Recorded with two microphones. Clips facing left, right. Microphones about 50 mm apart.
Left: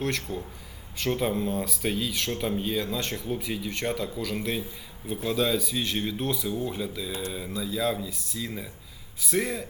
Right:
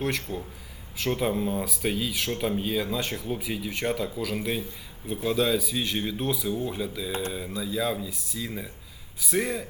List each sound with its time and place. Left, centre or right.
0.0 s speech: centre
7.1 s mantra: right
7.3 s speech: centre